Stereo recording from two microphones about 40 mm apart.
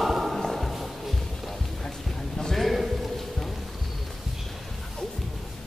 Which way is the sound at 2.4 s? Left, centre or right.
Centre.